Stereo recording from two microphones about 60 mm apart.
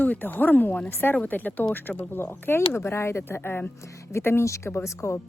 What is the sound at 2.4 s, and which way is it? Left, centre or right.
Speech, left.